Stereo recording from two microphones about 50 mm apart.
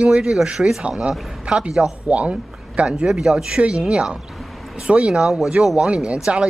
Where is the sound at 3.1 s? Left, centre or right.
Centre.